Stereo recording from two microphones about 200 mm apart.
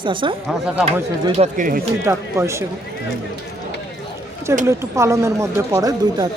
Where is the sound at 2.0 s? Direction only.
15° right (ahead or behind).